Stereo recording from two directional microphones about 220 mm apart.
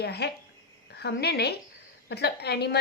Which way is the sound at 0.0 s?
50° left (ahead or behind).